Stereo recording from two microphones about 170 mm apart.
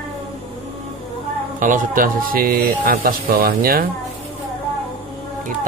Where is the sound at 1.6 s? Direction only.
50° right (ahead or behind).